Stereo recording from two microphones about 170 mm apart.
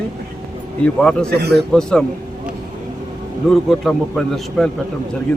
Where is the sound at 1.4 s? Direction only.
75° right (ahead or behind).